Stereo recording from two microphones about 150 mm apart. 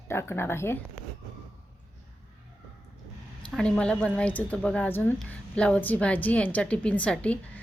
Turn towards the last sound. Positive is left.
turn(degrees=10)  # may be behind; listen again after turning